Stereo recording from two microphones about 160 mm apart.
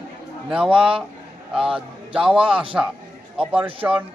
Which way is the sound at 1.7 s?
5° right (ahead or behind).